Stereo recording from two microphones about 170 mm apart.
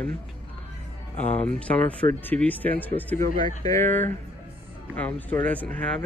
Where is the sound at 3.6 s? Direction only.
15° left (ahead or behind).